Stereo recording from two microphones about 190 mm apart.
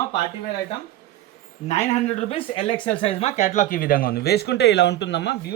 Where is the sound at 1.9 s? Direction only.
35° left (ahead or behind).